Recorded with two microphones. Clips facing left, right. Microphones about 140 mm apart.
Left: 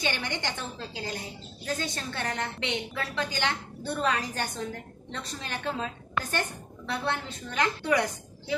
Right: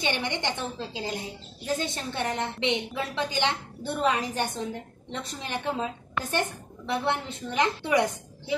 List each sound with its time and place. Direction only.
0.0 s a woman's voice: 20° right (ahead or behind)
6.9 s a woman's voice: 20° right (ahead or behind)